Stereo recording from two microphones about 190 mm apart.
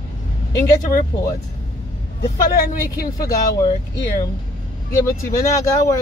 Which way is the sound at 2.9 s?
20° left (ahead or behind).